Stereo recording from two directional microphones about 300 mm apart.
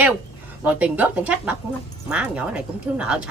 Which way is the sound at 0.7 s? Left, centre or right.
Centre.